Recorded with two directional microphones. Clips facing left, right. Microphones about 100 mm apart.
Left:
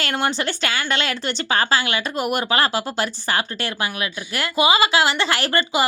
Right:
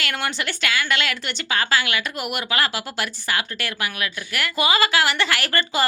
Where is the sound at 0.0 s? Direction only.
30° left (ahead or behind).